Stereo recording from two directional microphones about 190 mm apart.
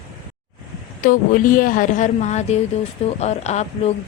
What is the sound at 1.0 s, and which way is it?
A woman's voice, 45° left (ahead or behind).